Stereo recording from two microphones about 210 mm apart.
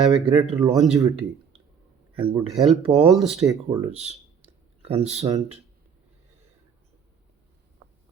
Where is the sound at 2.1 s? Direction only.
25° right (ahead or behind).